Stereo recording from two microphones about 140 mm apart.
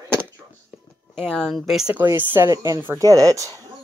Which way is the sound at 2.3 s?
20° right (ahead or behind).